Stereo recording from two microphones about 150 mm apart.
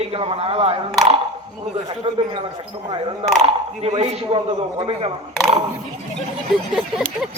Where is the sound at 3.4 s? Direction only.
45° right (ahead or behind).